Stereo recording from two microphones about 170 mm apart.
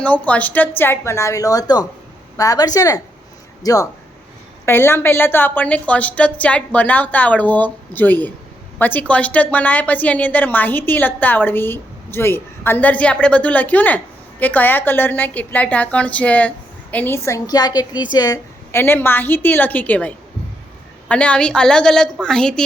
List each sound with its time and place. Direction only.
0.0 s a woman's voice: 10° left (ahead or behind)